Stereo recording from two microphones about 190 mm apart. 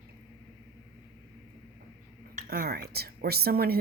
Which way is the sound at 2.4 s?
50° right (ahead or behind).